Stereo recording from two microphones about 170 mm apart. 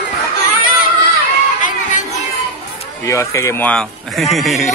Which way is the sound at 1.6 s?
50° left (ahead or behind).